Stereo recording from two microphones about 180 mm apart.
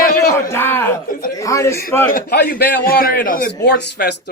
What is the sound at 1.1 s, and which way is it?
Speech, 50° left (ahead or behind).